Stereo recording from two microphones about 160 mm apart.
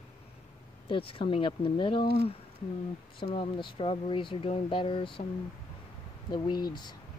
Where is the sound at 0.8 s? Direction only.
35° left (ahead or behind).